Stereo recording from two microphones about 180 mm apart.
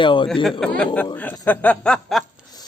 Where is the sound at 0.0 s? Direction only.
25° left (ahead or behind).